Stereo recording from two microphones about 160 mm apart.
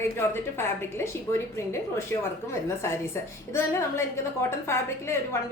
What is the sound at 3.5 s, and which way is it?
A woman's voice, 15° left (ahead or behind).